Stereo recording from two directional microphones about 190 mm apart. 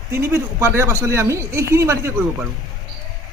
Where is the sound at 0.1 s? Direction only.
15° right (ahead or behind).